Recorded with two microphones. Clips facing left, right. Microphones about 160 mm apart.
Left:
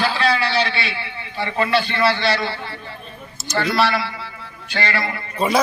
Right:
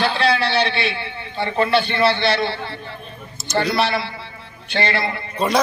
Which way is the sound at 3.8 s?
25° right (ahead or behind).